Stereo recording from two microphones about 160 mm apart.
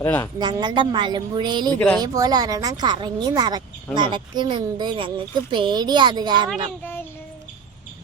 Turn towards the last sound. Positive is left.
turn(degrees=-25)  # may be behind; listen again after turning